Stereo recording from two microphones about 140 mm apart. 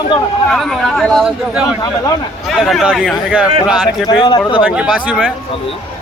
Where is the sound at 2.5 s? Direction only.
5° right (ahead or behind).